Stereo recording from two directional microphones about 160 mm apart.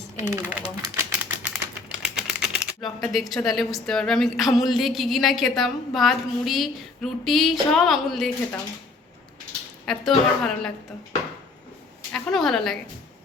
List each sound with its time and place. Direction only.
0.2 s speech: 20° right (ahead or behind)
1.2 s typewriter: 5° right (ahead or behind)
3.1 s a woman's voice: centre (ahead or behind)
9.8 s a woman's voice: 5° left (ahead or behind)
12.1 s a woman's voice: 5° left (ahead or behind)